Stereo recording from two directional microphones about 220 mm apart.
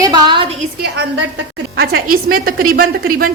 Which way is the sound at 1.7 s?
45° right (ahead or behind).